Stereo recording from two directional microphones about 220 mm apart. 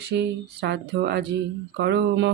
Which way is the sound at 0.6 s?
50° right (ahead or behind).